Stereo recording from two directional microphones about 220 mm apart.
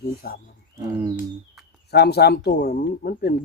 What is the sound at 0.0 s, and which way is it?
Speech, 45° left (ahead or behind).